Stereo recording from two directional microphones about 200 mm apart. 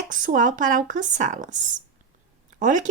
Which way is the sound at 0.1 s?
40° right (ahead or behind).